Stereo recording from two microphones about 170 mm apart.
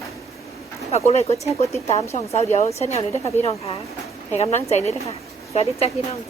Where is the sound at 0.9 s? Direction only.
40° left (ahead or behind).